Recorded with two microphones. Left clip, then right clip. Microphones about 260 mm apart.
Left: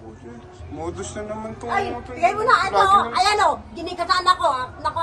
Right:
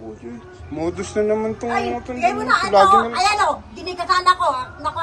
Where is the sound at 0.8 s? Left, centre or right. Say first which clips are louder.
Right 9 dB; right.